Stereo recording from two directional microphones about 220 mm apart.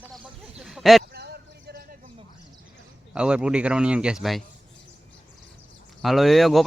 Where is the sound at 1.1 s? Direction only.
45° right (ahead or behind).